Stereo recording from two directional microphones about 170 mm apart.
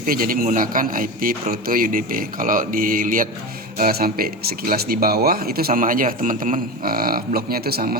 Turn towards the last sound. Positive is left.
turn(degrees=-65)  # may be behind; listen again after turning